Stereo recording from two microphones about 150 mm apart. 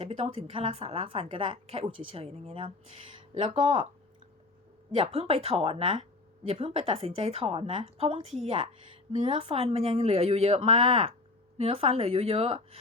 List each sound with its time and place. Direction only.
0.0 s speech: 40° right (ahead or behind)
4.9 s speech: 40° right (ahead or behind)